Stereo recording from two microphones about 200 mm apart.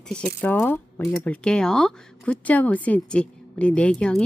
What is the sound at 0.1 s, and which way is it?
A woman's voice, 5° left (ahead or behind).